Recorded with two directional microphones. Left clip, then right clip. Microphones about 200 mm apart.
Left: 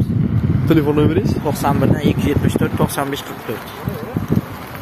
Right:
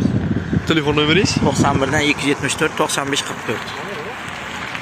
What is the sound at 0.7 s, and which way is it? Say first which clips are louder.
Speech: left 1 dB; 20° left (ahead or behind).